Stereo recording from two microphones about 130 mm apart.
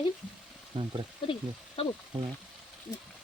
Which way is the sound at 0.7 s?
40° right (ahead or behind).